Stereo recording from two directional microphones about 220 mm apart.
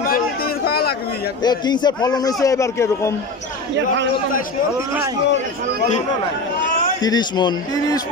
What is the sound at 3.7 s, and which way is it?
Speech, 55° right (ahead or behind).